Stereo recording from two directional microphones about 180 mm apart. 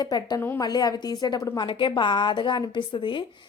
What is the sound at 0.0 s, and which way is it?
Speech, 20° left (ahead or behind).